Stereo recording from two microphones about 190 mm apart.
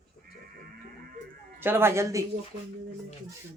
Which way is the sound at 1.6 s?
10° right (ahead or behind).